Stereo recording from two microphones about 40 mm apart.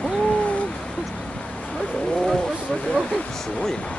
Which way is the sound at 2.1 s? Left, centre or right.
Centre.